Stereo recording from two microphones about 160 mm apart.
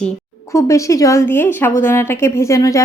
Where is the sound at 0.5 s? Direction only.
20° left (ahead or behind).